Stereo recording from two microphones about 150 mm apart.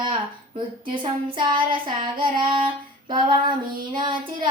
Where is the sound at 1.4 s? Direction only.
30° right (ahead or behind).